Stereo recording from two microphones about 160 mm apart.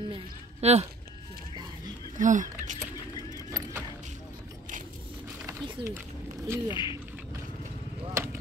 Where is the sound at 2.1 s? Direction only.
50° right (ahead or behind).